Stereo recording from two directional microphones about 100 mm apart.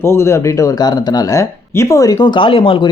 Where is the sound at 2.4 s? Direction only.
65° left (ahead or behind).